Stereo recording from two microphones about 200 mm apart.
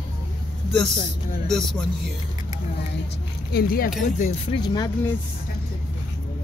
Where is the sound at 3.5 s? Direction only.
50° left (ahead or behind).